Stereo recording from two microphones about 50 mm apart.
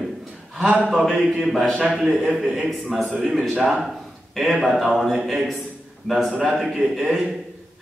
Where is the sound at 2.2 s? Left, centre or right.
Centre.